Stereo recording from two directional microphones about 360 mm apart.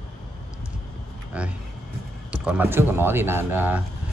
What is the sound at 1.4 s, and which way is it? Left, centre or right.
A man's voice, centre.